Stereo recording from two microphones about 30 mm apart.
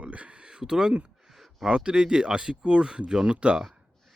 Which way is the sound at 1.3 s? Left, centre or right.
Centre.